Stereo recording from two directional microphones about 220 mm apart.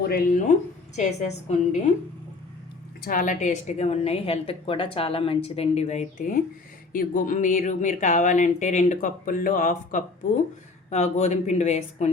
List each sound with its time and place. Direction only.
0.0 s speech: 40° left (ahead or behind)
3.0 s a woman's voice: 40° left (ahead or behind)